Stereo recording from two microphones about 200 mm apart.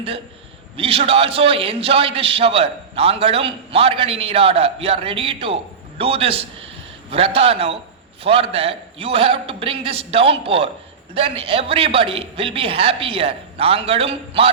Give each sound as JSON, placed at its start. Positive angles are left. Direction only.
{"t": 0.8, "sound": "a man's voice", "side_deg": -30}